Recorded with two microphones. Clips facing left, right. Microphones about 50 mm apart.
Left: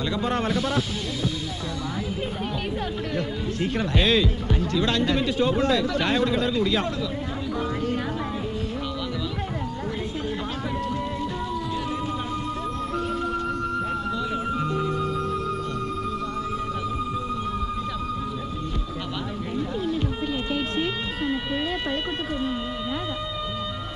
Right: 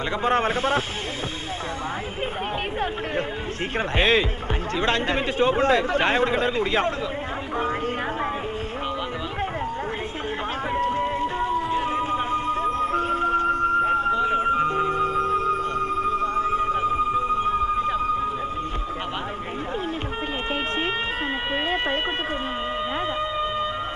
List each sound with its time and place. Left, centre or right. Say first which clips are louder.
0.2 s speech: right 5 dB; right
3.7 s speech: right 2 dB; right
11.5 s music: right 5 dB; right